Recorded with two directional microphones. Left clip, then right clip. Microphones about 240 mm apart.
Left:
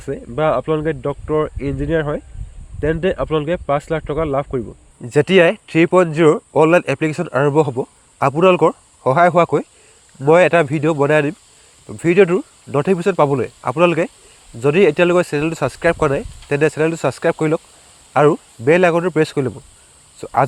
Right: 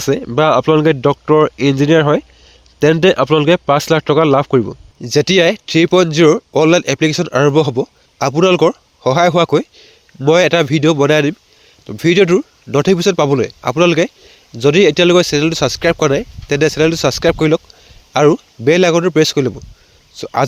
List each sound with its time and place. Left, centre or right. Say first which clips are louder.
0.0 s speech: right 6 dB; right